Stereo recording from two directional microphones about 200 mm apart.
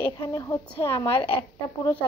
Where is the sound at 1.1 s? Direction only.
25° left (ahead or behind).